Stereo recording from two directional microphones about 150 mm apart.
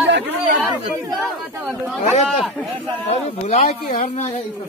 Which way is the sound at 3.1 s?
45° left (ahead or behind).